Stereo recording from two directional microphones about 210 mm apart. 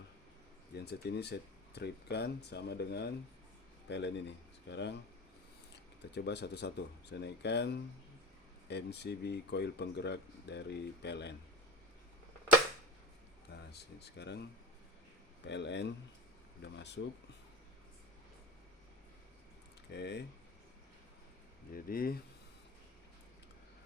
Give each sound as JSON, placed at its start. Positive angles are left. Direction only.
{"t": 0.7, "sound": "speech", "side_deg": 50}
{"t": 6.1, "sound": "speech", "side_deg": 55}
{"t": 13.5, "sound": "speech", "side_deg": 50}
{"t": 15.4, "sound": "a man's voice", "side_deg": 55}
{"t": 19.9, "sound": "a man's voice", "side_deg": 55}
{"t": 21.7, "sound": "speech", "side_deg": 45}